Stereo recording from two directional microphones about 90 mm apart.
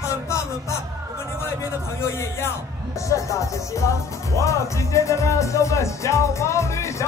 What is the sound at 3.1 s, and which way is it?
Music, 35° left (ahead or behind).